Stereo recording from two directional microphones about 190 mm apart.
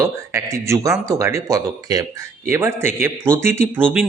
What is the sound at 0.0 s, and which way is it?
A man's voice, 15° right (ahead or behind).